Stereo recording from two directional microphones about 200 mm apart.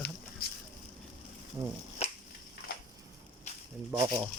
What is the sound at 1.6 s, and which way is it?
Speech, 25° right (ahead or behind).